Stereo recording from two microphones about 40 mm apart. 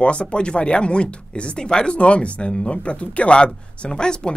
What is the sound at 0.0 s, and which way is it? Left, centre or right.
A man's voice, left.